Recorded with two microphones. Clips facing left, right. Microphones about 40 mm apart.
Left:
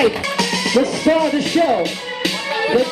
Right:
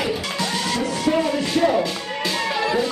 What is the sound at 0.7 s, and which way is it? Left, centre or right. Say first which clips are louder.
Music: left 7 dB; left.